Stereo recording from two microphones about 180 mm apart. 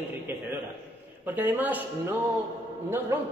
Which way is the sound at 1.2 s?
10° right (ahead or behind).